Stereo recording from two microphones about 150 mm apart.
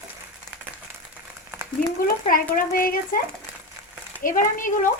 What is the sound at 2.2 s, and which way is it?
Speech, 65° left (ahead or behind).